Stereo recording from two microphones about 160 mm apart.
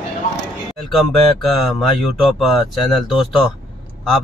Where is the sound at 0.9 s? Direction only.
Centre (ahead or behind).